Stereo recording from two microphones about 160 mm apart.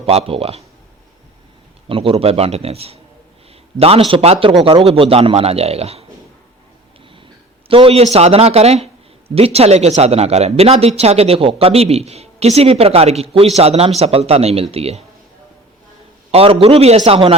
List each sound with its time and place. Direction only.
0.0 s speech: 40° right (ahead or behind)
1.9 s speech: 35° right (ahead or behind)
7.7 s speech: 35° right (ahead or behind)
16.3 s speech: 35° right (ahead or behind)